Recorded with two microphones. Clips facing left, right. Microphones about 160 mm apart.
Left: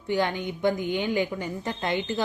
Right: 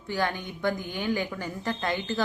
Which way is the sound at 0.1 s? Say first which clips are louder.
Left 4 dB; 20° left (ahead or behind).